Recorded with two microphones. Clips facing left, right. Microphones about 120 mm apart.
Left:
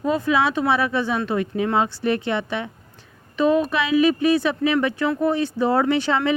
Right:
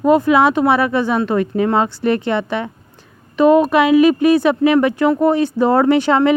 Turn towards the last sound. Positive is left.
turn(degrees=-45)  # may be behind; listen again after turning